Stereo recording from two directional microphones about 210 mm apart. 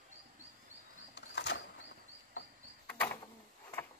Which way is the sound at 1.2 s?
55° left (ahead or behind).